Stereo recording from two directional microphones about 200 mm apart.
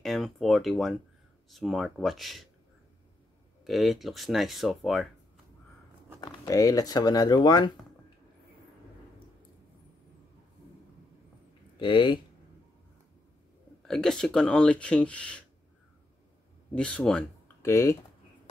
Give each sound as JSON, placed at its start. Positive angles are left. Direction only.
{"t": 0.0, "sound": "speech", "side_deg": 0}
{"t": 3.6, "sound": "speech", "side_deg": 0}
{"t": 6.2, "sound": "speech", "side_deg": 20}
{"t": 11.8, "sound": "speech", "side_deg": 25}
{"t": 13.8, "sound": "speech", "side_deg": 0}
{"t": 16.7, "sound": "speech", "side_deg": 5}